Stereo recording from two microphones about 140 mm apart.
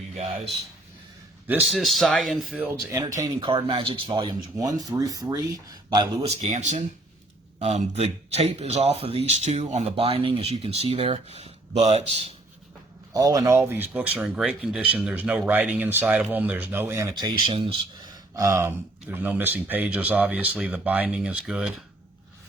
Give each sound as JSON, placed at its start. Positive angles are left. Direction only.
{"t": 1.5, "sound": "speech", "side_deg": -10}
{"t": 1.7, "sound": "speech", "side_deg": 0}
{"t": 3.2, "sound": "speech", "side_deg": -35}
{"t": 6.2, "sound": "speech", "side_deg": -55}
{"t": 13.1, "sound": "speech", "side_deg": -25}